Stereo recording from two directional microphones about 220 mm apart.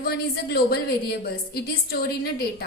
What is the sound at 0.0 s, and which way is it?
A woman's voice, 45° left (ahead or behind).